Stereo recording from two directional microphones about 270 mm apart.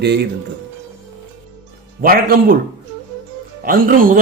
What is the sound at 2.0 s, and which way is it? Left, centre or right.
Speech, right.